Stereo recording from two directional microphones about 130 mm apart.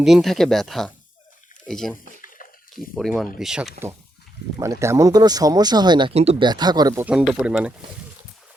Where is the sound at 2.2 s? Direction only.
90° left.